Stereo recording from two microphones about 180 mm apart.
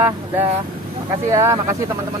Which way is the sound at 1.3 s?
15° right (ahead or behind).